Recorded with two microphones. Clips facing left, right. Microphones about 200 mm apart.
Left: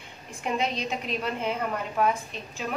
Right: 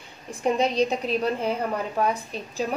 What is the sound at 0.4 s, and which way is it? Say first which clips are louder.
A woman's voice: right 7 dB; 35° right (ahead or behind).